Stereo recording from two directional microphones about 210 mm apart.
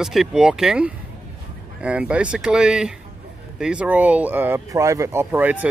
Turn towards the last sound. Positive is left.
turn(degrees=-10)  # may be behind; listen again after turning